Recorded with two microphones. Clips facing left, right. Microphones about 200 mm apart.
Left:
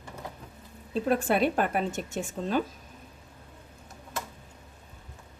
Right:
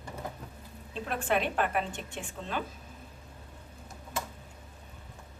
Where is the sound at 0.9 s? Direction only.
40° left (ahead or behind).